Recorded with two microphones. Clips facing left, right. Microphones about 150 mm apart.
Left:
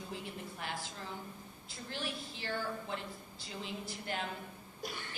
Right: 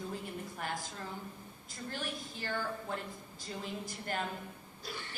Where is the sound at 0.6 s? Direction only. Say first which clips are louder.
Right 3 dB; 45° right (ahead or behind).